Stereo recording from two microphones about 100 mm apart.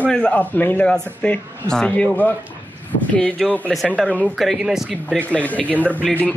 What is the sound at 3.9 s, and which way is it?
Speech, 15° right (ahead or behind).